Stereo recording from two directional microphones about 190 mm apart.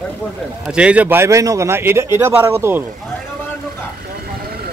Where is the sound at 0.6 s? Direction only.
5° right (ahead or behind).